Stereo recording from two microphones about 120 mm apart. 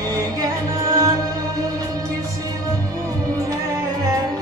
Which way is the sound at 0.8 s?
25° right (ahead or behind).